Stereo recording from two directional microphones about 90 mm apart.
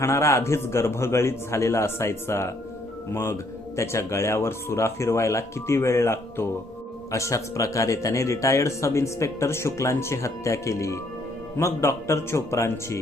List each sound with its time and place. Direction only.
0.0 s speech: 35° left (ahead or behind)